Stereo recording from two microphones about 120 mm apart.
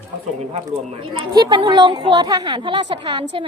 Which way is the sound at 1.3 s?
35° right (ahead or behind).